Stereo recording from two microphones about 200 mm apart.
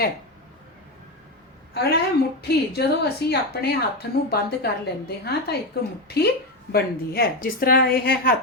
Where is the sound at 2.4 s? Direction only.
55° left (ahead or behind).